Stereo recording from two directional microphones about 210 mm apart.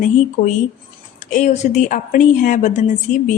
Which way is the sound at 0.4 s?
45° left (ahead or behind).